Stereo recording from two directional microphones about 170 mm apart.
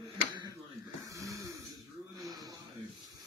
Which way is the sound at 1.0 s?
20° right (ahead or behind).